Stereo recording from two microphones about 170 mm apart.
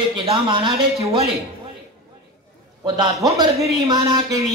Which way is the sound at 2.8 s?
25° right (ahead or behind).